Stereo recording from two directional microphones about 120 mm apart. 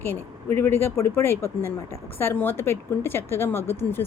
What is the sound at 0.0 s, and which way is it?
A woman's voice, 20° left (ahead or behind).